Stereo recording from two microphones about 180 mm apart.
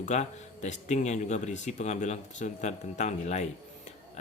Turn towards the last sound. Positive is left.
turn(degrees=40)  # may be behind; listen again after turning